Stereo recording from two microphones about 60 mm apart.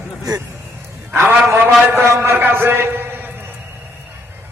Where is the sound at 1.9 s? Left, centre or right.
Right.